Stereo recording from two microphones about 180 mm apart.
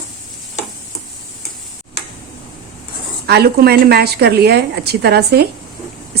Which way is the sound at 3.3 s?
60° right (ahead or behind).